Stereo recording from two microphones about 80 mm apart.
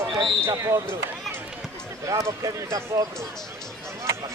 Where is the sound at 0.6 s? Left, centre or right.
Right.